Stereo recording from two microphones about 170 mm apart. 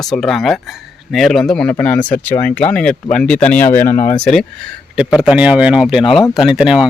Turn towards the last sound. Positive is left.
turn(degrees=-5)  # may be behind; listen again after turning